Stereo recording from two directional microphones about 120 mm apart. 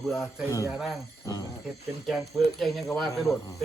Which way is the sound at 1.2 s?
25° left (ahead or behind).